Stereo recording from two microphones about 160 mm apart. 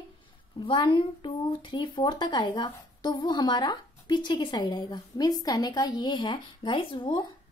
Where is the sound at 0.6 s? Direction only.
30° left (ahead or behind).